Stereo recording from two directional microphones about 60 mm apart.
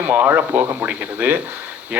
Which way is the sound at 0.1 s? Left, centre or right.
Right.